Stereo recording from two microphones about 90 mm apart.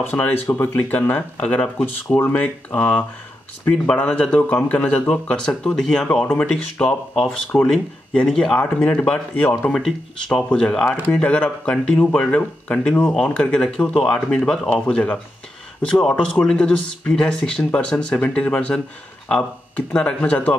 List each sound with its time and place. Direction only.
0.1 s speech: 25° left (ahead or behind)
9.8 s speech: 5° left (ahead or behind)
19.9 s speech: 10° left (ahead or behind)